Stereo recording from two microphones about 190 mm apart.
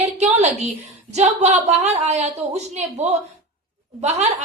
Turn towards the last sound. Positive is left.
turn(degrees=-35)  # may be behind; listen again after turning